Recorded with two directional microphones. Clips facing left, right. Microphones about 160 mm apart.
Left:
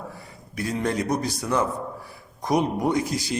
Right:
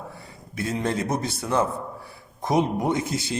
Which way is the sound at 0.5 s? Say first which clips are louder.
Even; 25° right (ahead or behind).